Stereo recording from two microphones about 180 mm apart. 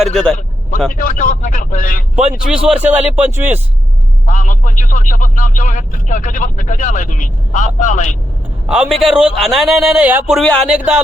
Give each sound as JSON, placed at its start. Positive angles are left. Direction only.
{"t": 0.0, "sound": "a man's voice", "side_deg": 0}
{"t": 0.9, "sound": "speech", "side_deg": 50}
{"t": 2.5, "sound": "speech", "side_deg": -5}
{"t": 4.3, "sound": "speech", "side_deg": 45}
{"t": 8.6, "sound": "a man's voice", "side_deg": -5}